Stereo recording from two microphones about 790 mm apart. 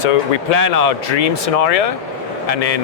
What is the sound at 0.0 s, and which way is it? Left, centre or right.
Speech, left.